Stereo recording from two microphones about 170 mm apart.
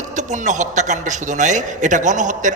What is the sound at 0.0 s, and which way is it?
A man's voice, 45° right (ahead or behind).